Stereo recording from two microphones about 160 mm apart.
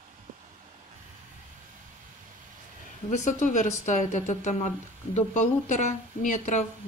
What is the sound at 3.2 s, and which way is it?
A woman's voice, 50° left (ahead or behind).